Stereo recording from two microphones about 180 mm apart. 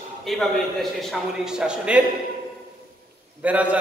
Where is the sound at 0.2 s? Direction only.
Centre (ahead or behind).